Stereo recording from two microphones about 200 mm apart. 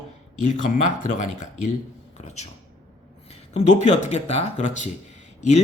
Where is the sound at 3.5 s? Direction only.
35° left (ahead or behind).